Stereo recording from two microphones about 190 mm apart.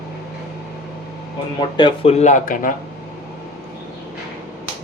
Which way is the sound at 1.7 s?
25° left (ahead or behind).